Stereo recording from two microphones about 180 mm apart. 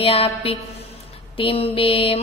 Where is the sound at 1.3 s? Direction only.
30° left (ahead or behind).